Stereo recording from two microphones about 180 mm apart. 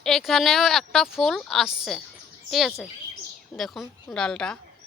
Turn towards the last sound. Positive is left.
turn(degrees=5)  # may be behind; listen again after turning